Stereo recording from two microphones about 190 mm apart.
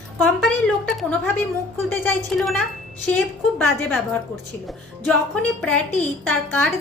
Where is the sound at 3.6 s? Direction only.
10° left (ahead or behind).